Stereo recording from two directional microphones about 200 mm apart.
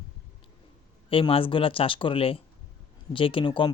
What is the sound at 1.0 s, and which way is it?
Speech, 25° left (ahead or behind).